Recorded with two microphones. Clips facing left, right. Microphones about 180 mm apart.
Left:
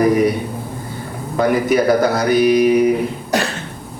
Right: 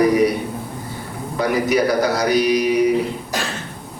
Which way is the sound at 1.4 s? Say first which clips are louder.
Left 3 dB; 50° left (ahead or behind).